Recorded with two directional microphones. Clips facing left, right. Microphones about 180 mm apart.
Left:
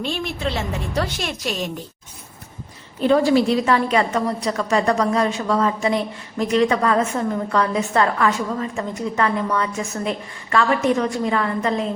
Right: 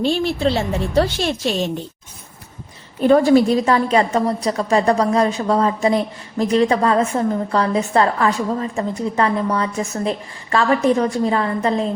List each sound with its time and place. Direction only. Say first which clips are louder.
0.0 s a woman's voice: right 7 dB; 30° right (ahead or behind)
3.0 s a woman's voice: right 4 dB; 50° right (ahead or behind); by 11.9 s 30° right (ahead or behind)